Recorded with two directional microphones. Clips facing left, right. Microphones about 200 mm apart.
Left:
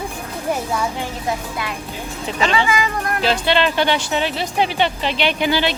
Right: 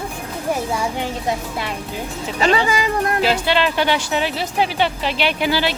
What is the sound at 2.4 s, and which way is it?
Speech, 40° right (ahead or behind).